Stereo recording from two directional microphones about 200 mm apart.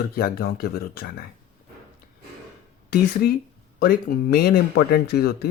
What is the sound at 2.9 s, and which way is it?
Speech, 50° left (ahead or behind).